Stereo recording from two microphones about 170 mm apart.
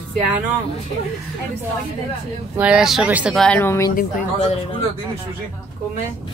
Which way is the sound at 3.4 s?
10° left (ahead or behind).